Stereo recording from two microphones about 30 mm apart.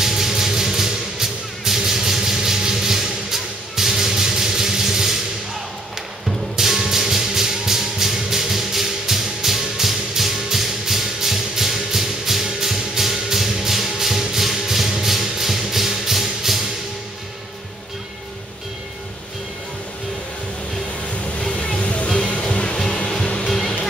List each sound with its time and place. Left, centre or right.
0.0 s music: centre
6.6 s music: centre
21.4 s a sound: left
21.7 s music: left
22.4 s music: left
23.4 s music: centre